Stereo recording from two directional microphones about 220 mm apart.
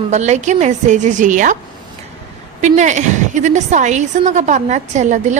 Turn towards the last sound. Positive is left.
turn(degrees=-35)  # may be behind; listen again after turning